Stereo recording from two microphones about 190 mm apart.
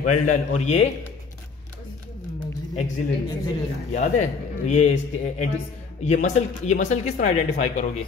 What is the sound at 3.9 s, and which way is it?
A man's voice, 40° left (ahead or behind).